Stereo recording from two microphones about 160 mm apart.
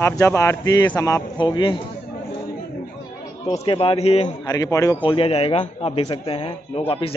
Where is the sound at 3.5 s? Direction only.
35° left (ahead or behind).